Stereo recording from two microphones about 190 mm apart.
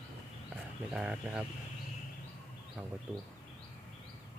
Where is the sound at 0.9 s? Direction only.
5° right (ahead or behind).